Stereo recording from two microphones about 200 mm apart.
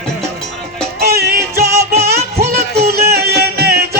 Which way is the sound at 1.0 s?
50° right (ahead or behind).